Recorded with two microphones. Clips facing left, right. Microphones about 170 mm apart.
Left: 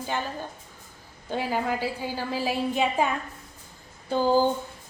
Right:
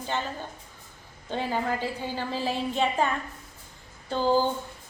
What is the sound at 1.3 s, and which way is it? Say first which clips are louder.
A woman's voice: left 1 dB; 10° left (ahead or behind).